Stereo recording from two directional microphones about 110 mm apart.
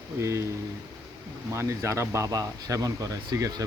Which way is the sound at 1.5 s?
25° right (ahead or behind).